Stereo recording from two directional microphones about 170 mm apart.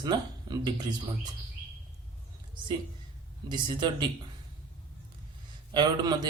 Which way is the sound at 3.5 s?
30° right (ahead or behind).